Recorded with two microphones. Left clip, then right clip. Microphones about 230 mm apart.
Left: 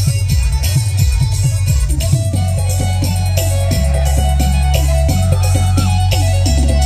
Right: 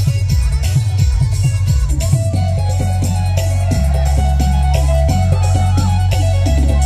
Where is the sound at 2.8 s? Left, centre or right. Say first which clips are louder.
Left 1 dB; centre.